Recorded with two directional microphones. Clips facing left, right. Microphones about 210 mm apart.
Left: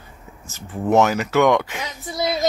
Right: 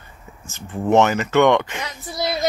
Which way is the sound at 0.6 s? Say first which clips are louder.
Right 1 dB; centre (ahead or behind).